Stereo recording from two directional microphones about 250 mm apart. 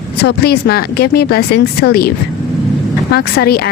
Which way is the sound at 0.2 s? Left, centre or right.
Left.